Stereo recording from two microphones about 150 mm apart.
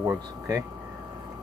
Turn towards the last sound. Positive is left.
turn(degrees=-20)  # may be behind; listen again after turning